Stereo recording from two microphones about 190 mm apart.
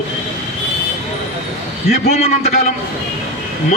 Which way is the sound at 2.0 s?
35° left (ahead or behind).